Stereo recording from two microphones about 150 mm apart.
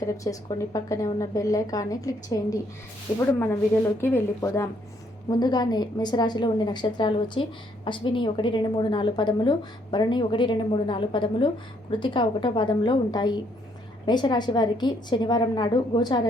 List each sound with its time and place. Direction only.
0.0 s a woman's voice: 20° left (ahead or behind)